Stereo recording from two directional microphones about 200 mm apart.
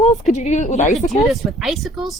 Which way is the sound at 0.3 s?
35° left (ahead or behind).